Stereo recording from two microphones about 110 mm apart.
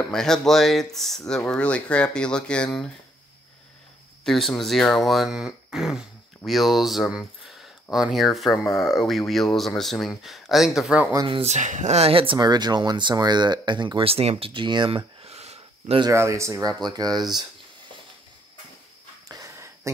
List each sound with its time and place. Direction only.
0.1 s speech: 5° left (ahead or behind)
4.2 s speech: 5° left (ahead or behind)
11.4 s speech: 90° right; by 12.4 s 55° right (ahead or behind)
12.4 s speech: 40° right (ahead or behind); by 14.5 s 65° right (ahead or behind)
14.5 s speech: 45° right (ahead or behind)
15.2 s a sound: 70° right (ahead or behind)
16.1 s speech: 25° right (ahead or behind)
16.8 s speech: 40° right (ahead or behind)
19.2 s a sound: 30° right (ahead or behind)